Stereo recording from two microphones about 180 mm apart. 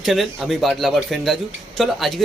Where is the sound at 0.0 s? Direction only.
Centre (ahead or behind).